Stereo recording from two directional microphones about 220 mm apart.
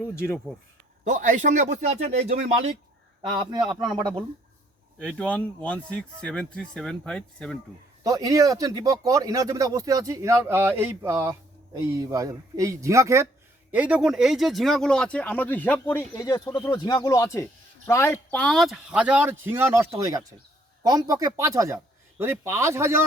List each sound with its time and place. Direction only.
1.0 s a man's voice: 35° right (ahead or behind); by 4.3 s 15° right (ahead or behind)
4.9 s speech: 5° left (ahead or behind)
8.0 s speech: 15° right (ahead or behind)